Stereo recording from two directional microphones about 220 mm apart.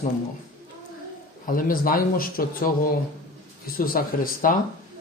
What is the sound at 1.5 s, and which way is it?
Speech, 40° left (ahead or behind).